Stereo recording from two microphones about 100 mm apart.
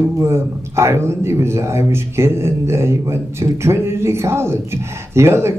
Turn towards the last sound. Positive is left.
turn(degrees=-25)  # may be behind; listen again after turning